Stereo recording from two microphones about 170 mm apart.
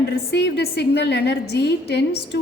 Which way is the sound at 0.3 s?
80° left.